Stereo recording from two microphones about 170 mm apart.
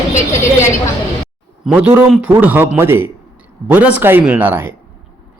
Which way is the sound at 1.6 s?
10° right (ahead or behind).